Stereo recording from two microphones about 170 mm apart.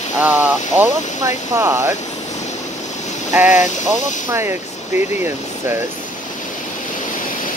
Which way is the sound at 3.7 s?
45° left (ahead or behind).